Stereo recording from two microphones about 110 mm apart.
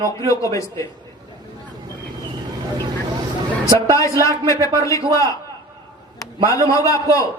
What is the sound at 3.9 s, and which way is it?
A man's voice, 30° left (ahead or behind).